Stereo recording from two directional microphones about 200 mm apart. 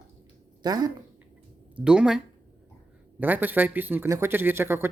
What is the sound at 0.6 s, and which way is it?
Speech, 20° right (ahead or behind).